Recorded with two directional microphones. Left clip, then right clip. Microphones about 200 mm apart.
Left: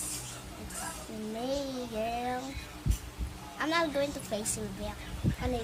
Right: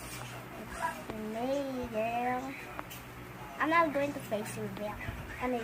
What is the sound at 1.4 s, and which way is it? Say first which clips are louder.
Speech: right 1 dB; 5° left (ahead or behind).